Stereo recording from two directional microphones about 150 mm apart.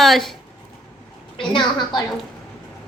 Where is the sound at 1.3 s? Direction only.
30° left (ahead or behind).